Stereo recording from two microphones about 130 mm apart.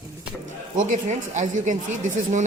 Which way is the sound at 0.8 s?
75° right (ahead or behind).